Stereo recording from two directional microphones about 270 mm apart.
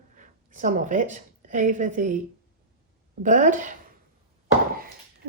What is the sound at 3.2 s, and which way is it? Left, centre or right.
Speech, right.